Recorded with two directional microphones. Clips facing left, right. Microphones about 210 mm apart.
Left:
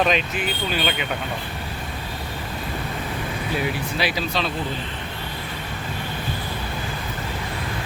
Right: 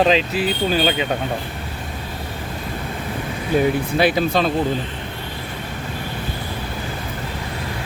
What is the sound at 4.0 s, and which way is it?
Speech, 50° right (ahead or behind).